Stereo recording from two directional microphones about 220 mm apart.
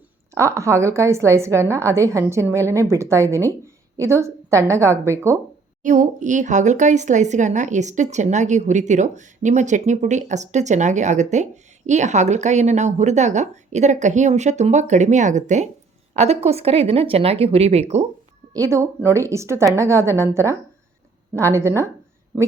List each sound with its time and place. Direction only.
0.3 s a woman's voice: 15° right (ahead or behind)
5.8 s speech: 35° right (ahead or behind)
18.5 s a woman's voice: 15° right (ahead or behind)